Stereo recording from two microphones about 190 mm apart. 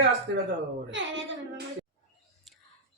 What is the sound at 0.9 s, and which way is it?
Child singing, 70° right (ahead or behind).